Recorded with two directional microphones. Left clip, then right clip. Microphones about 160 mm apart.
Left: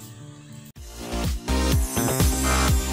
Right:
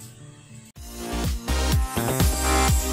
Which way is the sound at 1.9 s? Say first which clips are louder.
Even; centre (ahead or behind).